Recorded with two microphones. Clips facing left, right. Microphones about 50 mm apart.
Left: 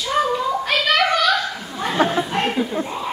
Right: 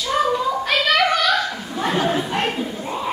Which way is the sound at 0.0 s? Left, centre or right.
Centre.